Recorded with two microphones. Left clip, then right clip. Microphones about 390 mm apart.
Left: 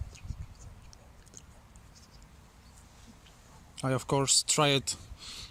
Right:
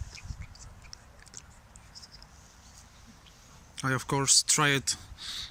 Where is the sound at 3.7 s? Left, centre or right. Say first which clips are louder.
Even; centre.